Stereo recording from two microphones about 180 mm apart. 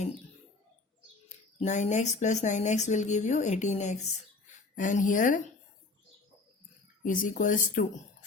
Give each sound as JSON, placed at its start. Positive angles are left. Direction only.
{"t": 1.5, "sound": "speech", "side_deg": 40}
{"t": 7.0, "sound": "speech", "side_deg": 45}